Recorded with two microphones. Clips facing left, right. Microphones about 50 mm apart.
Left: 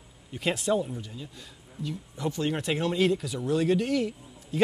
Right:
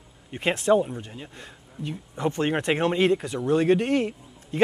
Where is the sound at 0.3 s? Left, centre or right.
Right.